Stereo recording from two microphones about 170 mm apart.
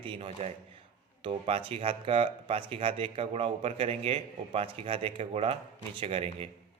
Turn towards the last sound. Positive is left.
turn(degrees=-35)  # may be behind; listen again after turning